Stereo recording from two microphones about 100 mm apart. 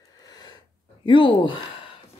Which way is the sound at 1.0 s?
55° left (ahead or behind).